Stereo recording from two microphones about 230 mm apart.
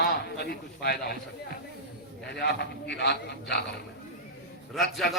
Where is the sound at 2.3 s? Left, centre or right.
Left.